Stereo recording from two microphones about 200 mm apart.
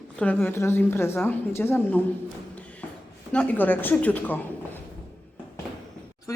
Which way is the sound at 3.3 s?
10° left (ahead or behind).